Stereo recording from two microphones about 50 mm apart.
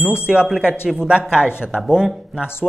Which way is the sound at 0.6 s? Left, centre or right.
Centre.